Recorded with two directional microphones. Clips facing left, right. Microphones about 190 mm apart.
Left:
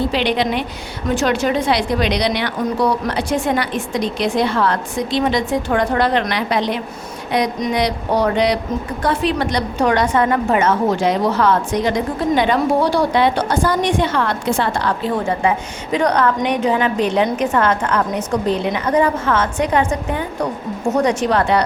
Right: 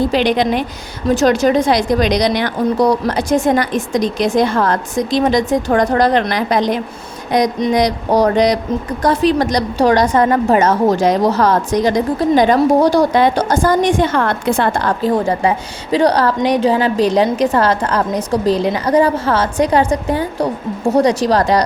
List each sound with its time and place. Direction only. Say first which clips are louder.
0.1 s a woman's voice: right 4 dB; 45° right (ahead or behind)